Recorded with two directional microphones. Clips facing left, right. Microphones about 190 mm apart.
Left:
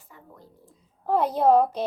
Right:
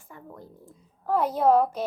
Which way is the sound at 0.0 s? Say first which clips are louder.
Right 5 dB; 50° right (ahead or behind).